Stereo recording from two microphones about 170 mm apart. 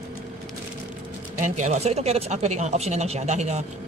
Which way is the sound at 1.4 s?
45° right (ahead or behind).